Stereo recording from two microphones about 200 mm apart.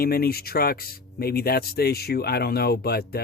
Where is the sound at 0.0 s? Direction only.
50° left (ahead or behind).